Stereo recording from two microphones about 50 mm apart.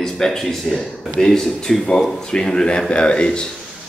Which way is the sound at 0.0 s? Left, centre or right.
Centre.